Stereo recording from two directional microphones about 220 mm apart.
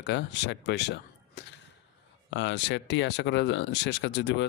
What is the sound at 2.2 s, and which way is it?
Speech, 55° left (ahead or behind).